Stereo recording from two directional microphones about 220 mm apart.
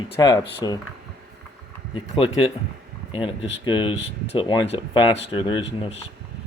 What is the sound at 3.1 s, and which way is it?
A man's voice, 25° left (ahead or behind).